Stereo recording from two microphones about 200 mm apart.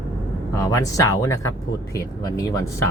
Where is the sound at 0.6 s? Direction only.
15° left (ahead or behind).